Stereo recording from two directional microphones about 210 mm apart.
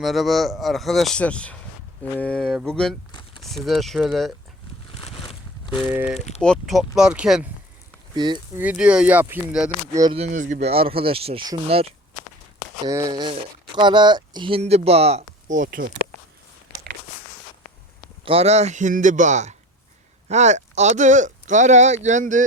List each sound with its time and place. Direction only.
0.0 s speech: centre (ahead or behind)
3.1 s crumpling: 20° left (ahead or behind)
3.4 s speech: centre (ahead or behind)
4.9 s a sound: 25° left (ahead or behind)
5.9 s speech: 10° right (ahead or behind)
6.1 s speech: 30° left (ahead or behind)
6.4 s speech: centre (ahead or behind)
8.1 s speech: 20° right (ahead or behind)
8.6 s speech: 5° right (ahead or behind)
10.0 s speech: 25° right (ahead or behind); by 15.9 s 40° right (ahead or behind)
18.3 s speech: 30° right (ahead or behind)